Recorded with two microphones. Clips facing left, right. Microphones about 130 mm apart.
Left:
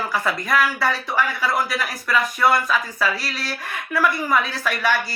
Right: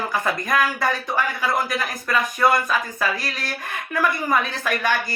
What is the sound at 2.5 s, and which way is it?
A woman's voice, 45° right (ahead or behind).